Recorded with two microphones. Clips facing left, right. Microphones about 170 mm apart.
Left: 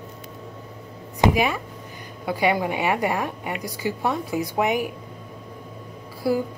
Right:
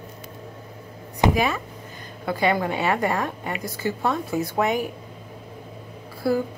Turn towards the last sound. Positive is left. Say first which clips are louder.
# even
turn(degrees=15)  # may be behind; listen again after turning